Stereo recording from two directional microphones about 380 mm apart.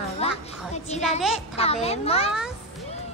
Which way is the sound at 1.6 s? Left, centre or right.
Centre.